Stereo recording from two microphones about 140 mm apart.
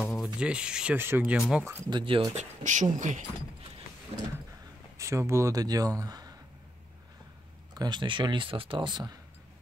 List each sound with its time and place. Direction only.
0.0 s speech: centre (ahead or behind)
1.9 s speech: 35° right (ahead or behind)
2.3 s speech: 60° right (ahead or behind)
4.1 s vehicle: 45° right (ahead or behind)
4.9 s speech: 20° right (ahead or behind)
7.7 s speech: 30° right (ahead or behind)